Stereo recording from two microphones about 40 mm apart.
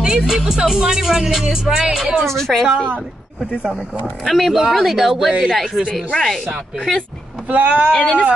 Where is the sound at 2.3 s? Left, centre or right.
Centre.